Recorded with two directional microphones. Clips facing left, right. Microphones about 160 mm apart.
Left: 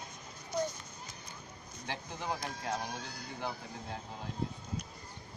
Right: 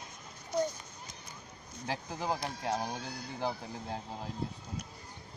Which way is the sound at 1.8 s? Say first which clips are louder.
Right 4 dB; 35° right (ahead or behind).